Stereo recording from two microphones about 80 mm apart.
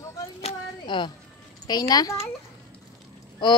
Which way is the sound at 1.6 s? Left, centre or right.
Left.